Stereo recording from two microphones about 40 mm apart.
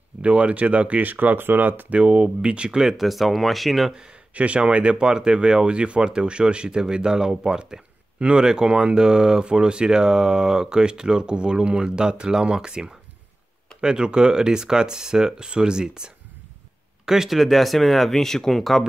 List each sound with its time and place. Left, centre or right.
0.2 s speech: right
1.9 s speech: right; by 3.1 s centre
3.1 s speech: centre
4.3 s speech: right; by 18.9 s centre